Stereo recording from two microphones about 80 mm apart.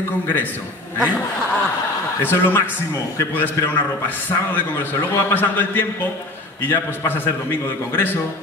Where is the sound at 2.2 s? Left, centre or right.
Left.